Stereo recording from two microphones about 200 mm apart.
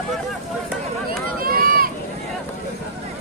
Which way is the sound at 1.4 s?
45° right (ahead or behind).